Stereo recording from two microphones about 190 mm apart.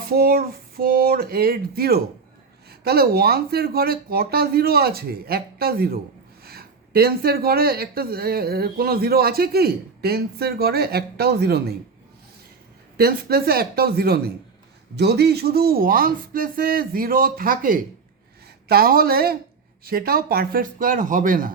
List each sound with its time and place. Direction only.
0.1 s speech: 50° right (ahead or behind)
13.0 s speech: 55° right (ahead or behind)